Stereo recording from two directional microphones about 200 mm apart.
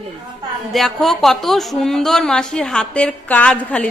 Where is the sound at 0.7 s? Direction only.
Centre (ahead or behind).